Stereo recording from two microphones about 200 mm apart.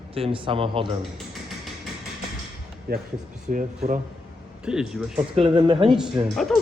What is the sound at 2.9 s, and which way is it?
Speech, 50° right (ahead or behind).